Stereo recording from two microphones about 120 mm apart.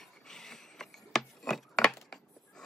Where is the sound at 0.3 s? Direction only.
5° left (ahead or behind).